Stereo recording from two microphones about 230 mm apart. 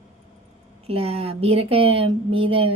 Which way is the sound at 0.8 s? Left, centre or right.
Right.